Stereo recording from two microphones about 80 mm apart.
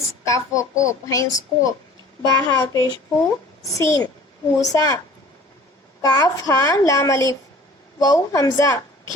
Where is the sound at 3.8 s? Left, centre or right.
Left.